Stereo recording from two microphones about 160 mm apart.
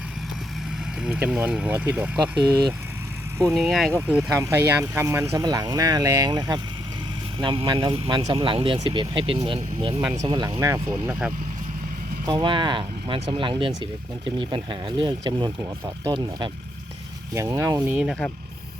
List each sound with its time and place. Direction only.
1.0 s speech: 5° right (ahead or behind)
3.5 s speech: centre (ahead or behind)
3.9 s speech: 15° right (ahead or behind); by 10.6 s 30° right (ahead or behind)
10.6 s speech: 20° right (ahead or behind)
12.2 s speech: 30° right (ahead or behind)
17.3 s speech: 20° right (ahead or behind)